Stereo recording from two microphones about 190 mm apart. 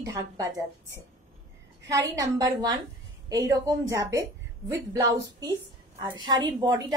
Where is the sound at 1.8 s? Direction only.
20° right (ahead or behind).